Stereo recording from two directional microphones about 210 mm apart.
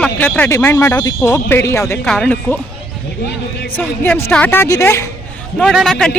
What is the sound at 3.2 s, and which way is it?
Speech, 55° left (ahead or behind).